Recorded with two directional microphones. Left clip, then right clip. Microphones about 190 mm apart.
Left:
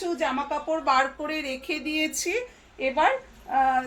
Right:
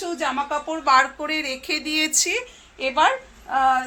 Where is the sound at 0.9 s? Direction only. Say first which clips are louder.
Right 7 dB; 20° right (ahead or behind).